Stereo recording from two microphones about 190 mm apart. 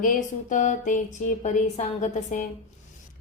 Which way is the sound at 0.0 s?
45° left (ahead or behind).